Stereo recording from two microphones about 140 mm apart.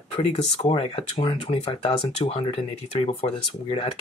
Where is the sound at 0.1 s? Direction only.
45° left (ahead or behind).